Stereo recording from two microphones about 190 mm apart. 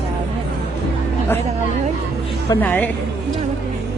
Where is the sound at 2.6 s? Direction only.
10° left (ahead or behind).